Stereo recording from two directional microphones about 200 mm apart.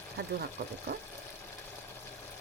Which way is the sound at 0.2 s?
55° right (ahead or behind).